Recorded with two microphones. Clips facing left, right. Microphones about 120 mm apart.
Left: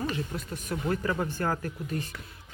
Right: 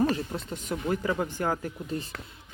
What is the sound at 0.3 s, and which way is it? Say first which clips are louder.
Speech: right 1 dB; 20° right (ahead or behind).